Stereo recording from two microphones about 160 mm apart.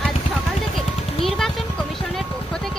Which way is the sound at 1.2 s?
Centre (ahead or behind).